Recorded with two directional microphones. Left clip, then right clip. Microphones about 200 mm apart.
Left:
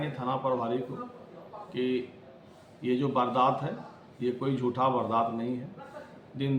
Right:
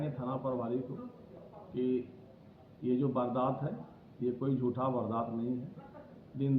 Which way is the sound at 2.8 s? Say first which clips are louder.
Left 5 dB; 35° left (ahead or behind).